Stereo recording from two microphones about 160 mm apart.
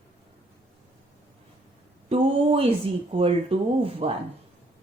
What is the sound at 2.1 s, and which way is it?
Speech, 35° right (ahead or behind).